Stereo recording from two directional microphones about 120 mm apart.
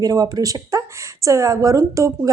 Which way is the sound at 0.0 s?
30° right (ahead or behind).